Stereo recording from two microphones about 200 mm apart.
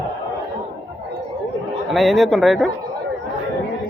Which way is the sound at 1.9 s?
Centre (ahead or behind).